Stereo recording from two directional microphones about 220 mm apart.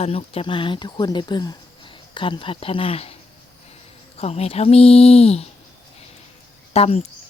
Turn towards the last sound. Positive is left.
turn(degrees=25)  # may be behind; listen again after turning